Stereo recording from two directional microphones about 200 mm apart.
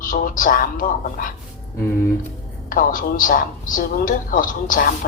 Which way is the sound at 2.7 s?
45° left (ahead or behind).